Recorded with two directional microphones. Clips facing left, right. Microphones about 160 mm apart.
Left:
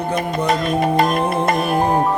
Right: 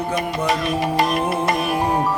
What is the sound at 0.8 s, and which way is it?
Music, 50° left (ahead or behind).